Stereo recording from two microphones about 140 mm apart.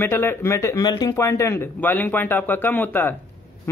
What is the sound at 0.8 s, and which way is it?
A man's voice, 30° left (ahead or behind).